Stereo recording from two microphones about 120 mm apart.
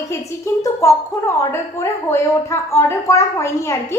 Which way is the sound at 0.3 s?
20° left (ahead or behind).